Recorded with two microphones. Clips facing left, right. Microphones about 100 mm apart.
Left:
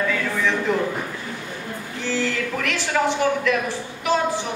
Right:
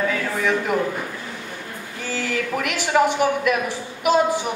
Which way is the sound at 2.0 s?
10° right (ahead or behind).